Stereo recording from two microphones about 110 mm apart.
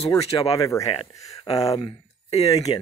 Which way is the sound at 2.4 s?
35° left (ahead or behind).